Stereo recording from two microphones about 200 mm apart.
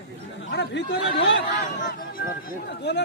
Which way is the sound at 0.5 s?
60° left (ahead or behind).